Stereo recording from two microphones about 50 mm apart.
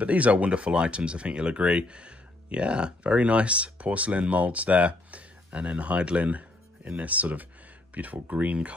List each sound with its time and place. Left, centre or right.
0.0 s speech: right